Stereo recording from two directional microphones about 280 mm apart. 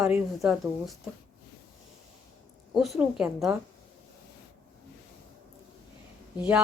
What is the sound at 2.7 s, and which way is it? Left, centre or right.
Speech, centre.